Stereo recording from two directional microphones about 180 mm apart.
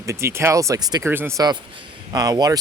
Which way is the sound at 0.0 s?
15° right (ahead or behind).